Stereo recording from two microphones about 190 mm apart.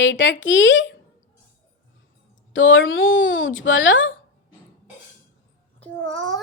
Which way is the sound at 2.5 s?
90° left.